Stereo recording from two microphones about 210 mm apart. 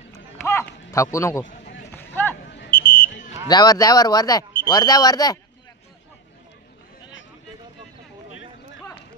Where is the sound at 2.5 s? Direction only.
50° left (ahead or behind).